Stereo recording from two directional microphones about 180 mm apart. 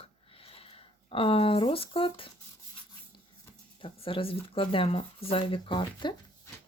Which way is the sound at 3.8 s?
30° left (ahead or behind).